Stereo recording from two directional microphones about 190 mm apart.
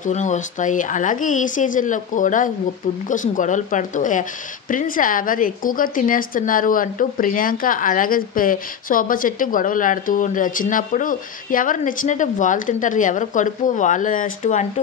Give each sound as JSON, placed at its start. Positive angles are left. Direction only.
{"t": 0.0, "sound": "speech", "side_deg": 40}